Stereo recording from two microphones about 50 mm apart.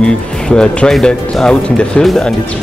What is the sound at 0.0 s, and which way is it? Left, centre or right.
Speech, centre.